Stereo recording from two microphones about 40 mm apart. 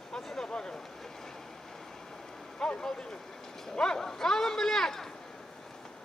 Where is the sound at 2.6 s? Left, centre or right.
Centre.